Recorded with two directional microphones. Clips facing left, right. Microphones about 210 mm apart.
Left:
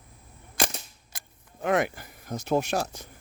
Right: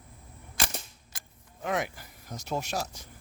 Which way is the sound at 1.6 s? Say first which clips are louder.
Left 6 dB; 55° left (ahead or behind).